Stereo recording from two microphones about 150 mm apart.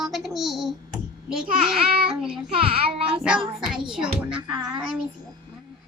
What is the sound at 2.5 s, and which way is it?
Speech, 40° right (ahead or behind).